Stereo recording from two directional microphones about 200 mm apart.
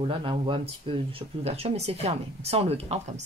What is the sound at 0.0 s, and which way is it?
Speech, 25° right (ahead or behind).